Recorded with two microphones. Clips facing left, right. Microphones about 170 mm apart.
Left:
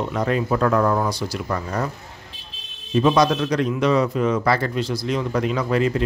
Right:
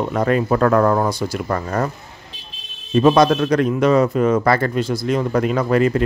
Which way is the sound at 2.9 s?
55° right (ahead or behind).